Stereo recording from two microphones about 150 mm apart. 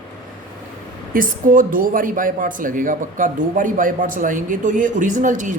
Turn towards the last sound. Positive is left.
turn(degrees=-55)  # may be behind; listen again after turning